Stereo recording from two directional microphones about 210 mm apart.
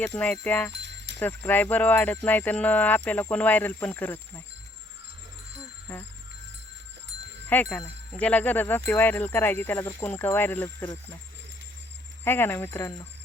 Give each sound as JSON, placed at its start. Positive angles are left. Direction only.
{"t": 0.0, "sound": "speech", "side_deg": 5}
{"t": 0.7, "sound": "a sound", "side_deg": -55}
{"t": 1.2, "sound": "speech", "side_deg": 10}
{"t": 5.9, "sound": "speech", "side_deg": 10}
{"t": 7.5, "sound": "speech", "side_deg": 10}
{"t": 12.2, "sound": "speech", "side_deg": 10}